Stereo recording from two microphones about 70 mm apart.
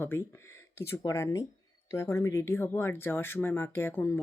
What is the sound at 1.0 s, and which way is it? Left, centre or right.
Speech, left.